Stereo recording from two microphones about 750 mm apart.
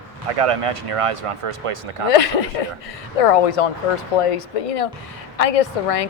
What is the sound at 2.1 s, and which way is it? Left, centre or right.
Speech, left.